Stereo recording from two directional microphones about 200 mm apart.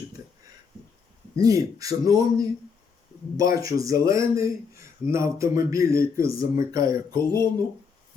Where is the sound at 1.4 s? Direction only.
15° right (ahead or behind).